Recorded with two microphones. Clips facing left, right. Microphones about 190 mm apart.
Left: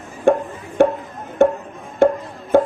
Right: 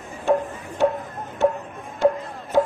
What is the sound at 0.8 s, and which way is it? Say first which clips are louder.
Music: left 5 dB; 55° left (ahead or behind).